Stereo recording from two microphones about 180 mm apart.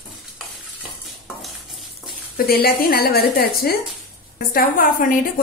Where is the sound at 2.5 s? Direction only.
55° left (ahead or behind).